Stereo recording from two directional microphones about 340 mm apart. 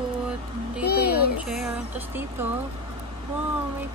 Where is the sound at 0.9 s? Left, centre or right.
Left.